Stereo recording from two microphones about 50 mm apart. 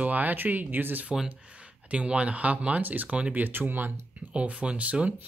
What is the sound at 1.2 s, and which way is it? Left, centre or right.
Speech, right.